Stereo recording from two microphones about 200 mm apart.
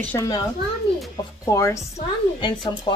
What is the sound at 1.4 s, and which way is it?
Speech, 15° left (ahead or behind).